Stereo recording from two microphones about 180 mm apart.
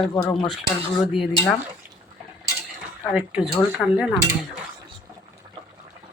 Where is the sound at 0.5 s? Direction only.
Centre (ahead or behind).